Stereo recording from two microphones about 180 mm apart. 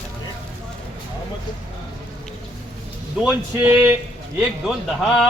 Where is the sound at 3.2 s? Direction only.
10° right (ahead or behind).